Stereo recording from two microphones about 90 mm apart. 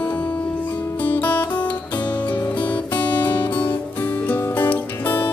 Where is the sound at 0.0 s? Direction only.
15° left (ahead or behind).